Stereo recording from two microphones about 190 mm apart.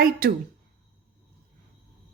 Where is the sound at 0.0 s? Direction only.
55° right (ahead or behind).